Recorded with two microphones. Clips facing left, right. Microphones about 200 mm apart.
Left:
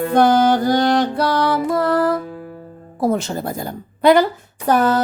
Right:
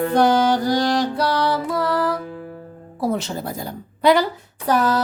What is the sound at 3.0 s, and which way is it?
A woman's voice, 50° left (ahead or behind).